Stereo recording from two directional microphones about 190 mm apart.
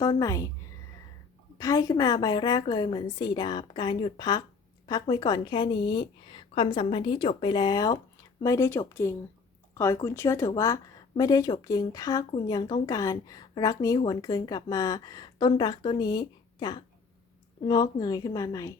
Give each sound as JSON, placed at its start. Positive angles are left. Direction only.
{"t": 0.0, "sound": "a woman's voice", "side_deg": 15}
{"t": 1.5, "sound": "a woman's voice", "side_deg": 15}